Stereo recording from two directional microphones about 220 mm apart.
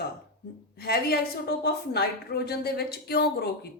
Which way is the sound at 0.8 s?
45° left (ahead or behind).